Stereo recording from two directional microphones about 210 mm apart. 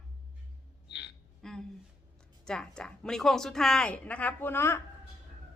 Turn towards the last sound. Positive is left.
turn(degrees=10)  # may be behind; listen again after turning